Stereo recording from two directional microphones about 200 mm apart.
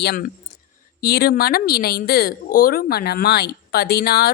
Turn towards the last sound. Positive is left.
turn(degrees=50)  # may be behind; listen again after turning